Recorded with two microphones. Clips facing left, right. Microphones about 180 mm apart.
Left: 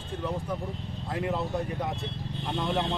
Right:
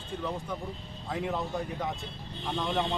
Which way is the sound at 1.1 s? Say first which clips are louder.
Left 2 dB; 5° left (ahead or behind).